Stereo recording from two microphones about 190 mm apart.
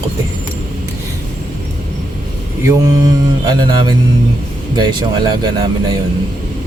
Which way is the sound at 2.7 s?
20° right (ahead or behind).